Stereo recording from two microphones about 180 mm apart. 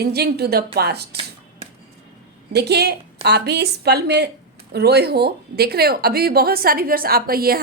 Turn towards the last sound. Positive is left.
turn(degrees=-55)  # may be behind; listen again after turning